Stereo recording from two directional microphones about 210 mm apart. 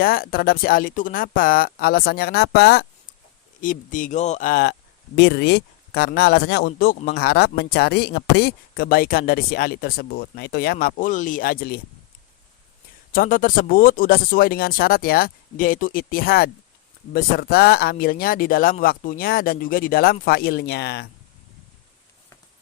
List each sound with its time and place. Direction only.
0.0 s speech: 45° left (ahead or behind)
3.6 s speech: 40° left (ahead or behind)
13.1 s speech: 40° left (ahead or behind)